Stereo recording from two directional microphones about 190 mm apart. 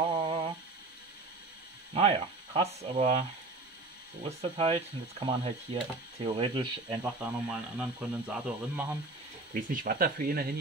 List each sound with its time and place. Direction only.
0.2 s a sound: 30° right (ahead or behind)
2.0 s speech: 30° right (ahead or behind)
7.0 s speech: 5° right (ahead or behind)
9.5 s speech: 45° right (ahead or behind)